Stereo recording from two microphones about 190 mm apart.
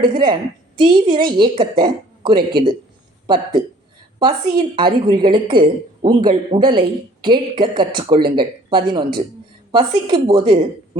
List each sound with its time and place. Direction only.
0.0 s a woman's voice: 25° right (ahead or behind)